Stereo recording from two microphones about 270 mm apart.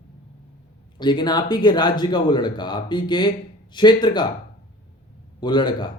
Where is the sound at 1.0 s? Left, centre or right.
Centre.